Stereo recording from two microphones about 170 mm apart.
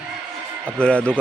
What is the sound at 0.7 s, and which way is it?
Speech, 5° left (ahead or behind).